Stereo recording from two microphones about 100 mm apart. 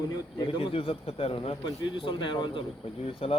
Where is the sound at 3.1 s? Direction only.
70° left (ahead or behind).